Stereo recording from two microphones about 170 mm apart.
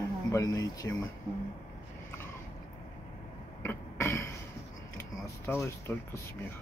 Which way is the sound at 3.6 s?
15° left (ahead or behind).